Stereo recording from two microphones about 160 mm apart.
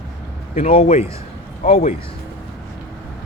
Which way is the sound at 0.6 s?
40° left (ahead or behind).